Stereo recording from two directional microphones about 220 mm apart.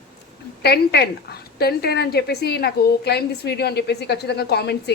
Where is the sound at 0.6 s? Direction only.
50° left (ahead or behind).